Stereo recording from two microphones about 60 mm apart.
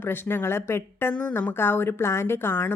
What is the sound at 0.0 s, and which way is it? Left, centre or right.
A woman's voice, left.